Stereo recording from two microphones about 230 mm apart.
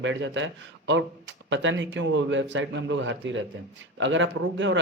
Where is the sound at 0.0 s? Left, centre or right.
Right.